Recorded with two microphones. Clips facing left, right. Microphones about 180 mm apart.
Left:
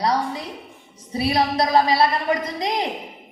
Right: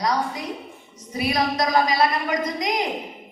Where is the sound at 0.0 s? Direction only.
30° left (ahead or behind).